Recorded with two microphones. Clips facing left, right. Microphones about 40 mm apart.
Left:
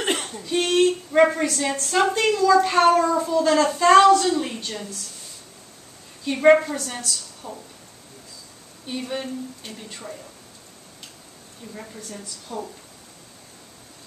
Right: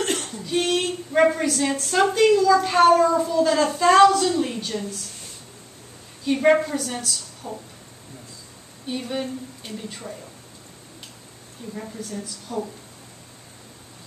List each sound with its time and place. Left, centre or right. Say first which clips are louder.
0.0 s a sound: left 1 dB; left
0.5 s a sound: left 4 dB; centre
1.3 s a woman's voice: right 1 dB; centre
6.2 s a woman's voice: left 2 dB; centre
8.8 s a woman's voice: right 1 dB; centre
11.7 s a woman's voice: right 5 dB; centre